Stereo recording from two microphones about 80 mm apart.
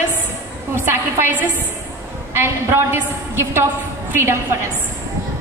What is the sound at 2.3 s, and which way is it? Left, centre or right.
A woman's voice, right.